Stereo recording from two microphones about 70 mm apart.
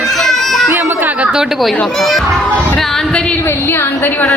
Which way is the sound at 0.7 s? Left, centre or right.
Right.